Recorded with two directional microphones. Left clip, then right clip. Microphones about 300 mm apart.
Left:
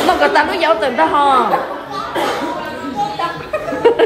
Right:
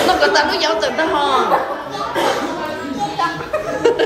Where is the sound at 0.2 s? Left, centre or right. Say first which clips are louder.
Left 1 dB; centre.